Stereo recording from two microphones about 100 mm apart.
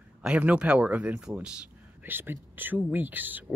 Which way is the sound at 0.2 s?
10° right (ahead or behind).